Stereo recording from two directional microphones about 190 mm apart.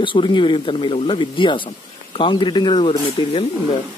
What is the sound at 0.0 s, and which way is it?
Speech, 25° left (ahead or behind).